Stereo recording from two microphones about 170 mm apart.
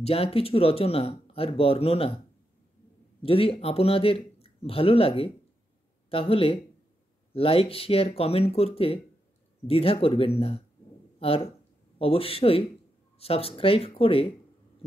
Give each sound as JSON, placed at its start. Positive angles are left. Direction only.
{"t": 0.0, "sound": "speech", "side_deg": 35}
{"t": 3.2, "sound": "speech", "side_deg": 35}